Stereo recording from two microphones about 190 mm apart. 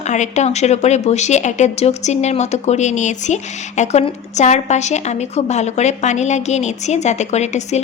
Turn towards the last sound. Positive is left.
turn(degrees=35)  # may be behind; listen again after turning